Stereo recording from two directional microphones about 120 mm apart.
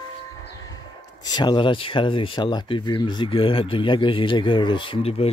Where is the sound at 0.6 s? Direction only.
35° left (ahead or behind); by 5.3 s 55° left (ahead or behind).